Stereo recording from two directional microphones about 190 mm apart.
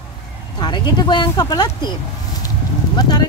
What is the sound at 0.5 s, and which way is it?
Speech, 25° left (ahead or behind).